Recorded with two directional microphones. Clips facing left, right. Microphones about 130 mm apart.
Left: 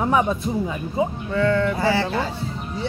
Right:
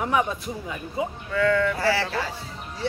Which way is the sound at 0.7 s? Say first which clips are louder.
Left 5 dB; 25° left (ahead or behind).